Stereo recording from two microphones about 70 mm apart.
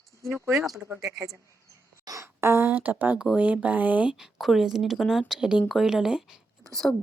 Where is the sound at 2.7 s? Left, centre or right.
Right.